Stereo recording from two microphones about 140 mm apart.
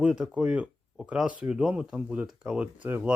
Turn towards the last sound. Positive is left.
turn(degrees=-15)  # may be behind; listen again after turning